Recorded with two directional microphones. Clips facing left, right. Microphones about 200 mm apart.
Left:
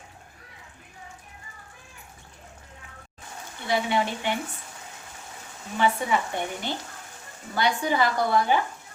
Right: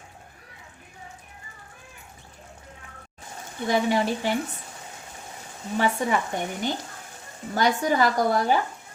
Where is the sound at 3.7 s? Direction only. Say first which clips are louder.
Right 3 dB; 40° right (ahead or behind).